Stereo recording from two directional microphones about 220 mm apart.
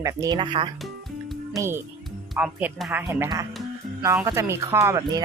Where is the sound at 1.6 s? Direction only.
10° right (ahead or behind).